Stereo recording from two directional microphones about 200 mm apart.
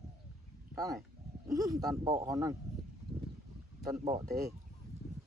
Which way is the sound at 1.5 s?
15° right (ahead or behind).